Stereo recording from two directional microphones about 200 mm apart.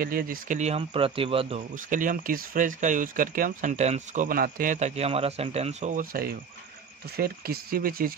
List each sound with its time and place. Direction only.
0.0 s speech: 45° right (ahead or behind); by 1.6 s 25° right (ahead or behind)
1.8 s speech: 40° right (ahead or behind)